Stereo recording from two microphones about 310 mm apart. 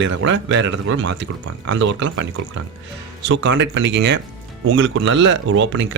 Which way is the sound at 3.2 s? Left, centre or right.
Right.